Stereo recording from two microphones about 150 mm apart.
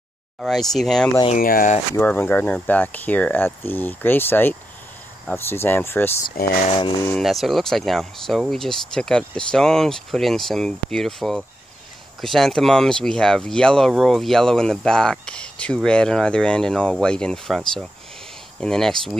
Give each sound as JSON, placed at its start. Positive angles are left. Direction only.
{"t": 0.4, "sound": "speech", "side_deg": 0}
{"t": 1.4, "sound": "speech", "side_deg": 70}
{"t": 2.0, "sound": "speech", "side_deg": 15}
{"t": 7.2, "sound": "speech", "side_deg": 0}